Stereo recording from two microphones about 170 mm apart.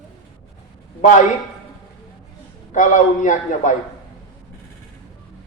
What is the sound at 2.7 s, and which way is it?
A man's voice, 50° left (ahead or behind).